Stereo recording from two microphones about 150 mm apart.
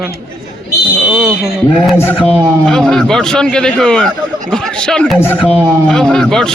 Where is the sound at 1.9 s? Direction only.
15° left (ahead or behind).